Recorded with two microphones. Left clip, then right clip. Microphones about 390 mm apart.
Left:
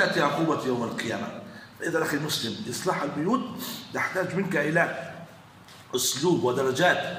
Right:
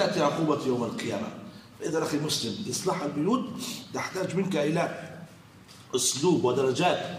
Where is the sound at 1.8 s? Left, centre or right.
Centre.